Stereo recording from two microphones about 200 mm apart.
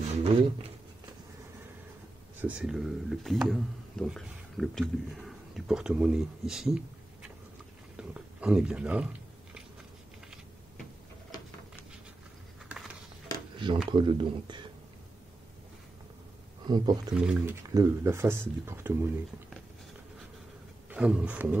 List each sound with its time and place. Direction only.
0.1 s a sound: 30° right (ahead or behind)
2.4 s speech: 5° right (ahead or behind)
7.9 s chewing: 5° right (ahead or behind)
13.8 s speech: 25° right (ahead or behind)
16.6 s speech: 20° right (ahead or behind)
17.1 s speech: 5° right (ahead or behind)
17.6 s speech: 15° right (ahead or behind)
20.9 s speech: 5° right (ahead or behind)